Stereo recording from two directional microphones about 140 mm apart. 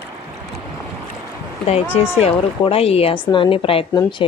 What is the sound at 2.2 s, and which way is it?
A woman's voice, 45° left (ahead or behind).